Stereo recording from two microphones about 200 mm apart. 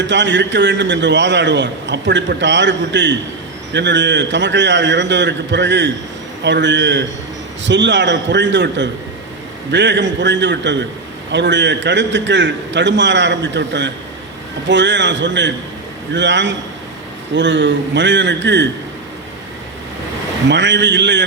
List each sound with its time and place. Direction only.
0.1 s a man's voice: 65° right (ahead or behind)
20.5 s a man's voice: 60° right (ahead or behind)